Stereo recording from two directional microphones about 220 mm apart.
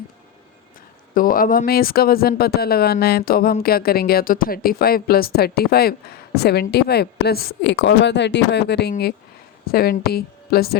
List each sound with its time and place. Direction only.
1.1 s speech: 40° left (ahead or behind)